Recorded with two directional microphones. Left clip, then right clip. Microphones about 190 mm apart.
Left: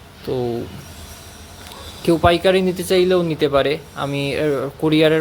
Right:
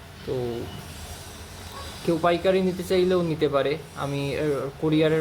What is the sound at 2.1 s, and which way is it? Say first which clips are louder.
Speech: left 7 dB; 25° left (ahead or behind).